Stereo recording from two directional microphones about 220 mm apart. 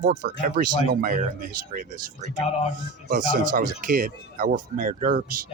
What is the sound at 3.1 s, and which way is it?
Speech, 40° right (ahead or behind).